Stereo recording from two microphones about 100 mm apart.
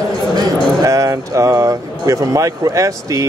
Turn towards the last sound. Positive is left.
turn(degrees=-30)  # may be behind; listen again after turning